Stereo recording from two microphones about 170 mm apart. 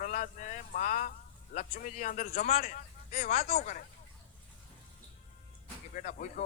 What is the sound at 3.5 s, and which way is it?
Speech, 50° left (ahead or behind).